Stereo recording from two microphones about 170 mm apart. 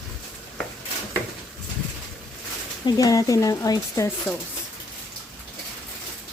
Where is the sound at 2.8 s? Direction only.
20° left (ahead or behind).